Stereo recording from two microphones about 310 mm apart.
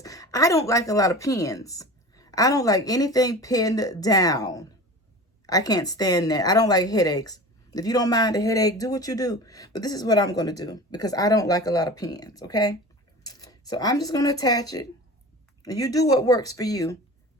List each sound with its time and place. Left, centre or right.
0.0 s a woman's voice: centre